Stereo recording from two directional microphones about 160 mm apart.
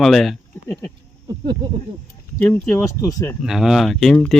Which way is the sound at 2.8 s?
20° left (ahead or behind).